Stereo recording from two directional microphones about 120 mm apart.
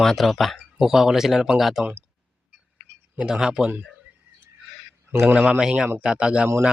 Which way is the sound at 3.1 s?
10° right (ahead or behind).